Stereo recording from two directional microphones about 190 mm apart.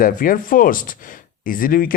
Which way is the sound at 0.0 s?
45° left (ahead or behind).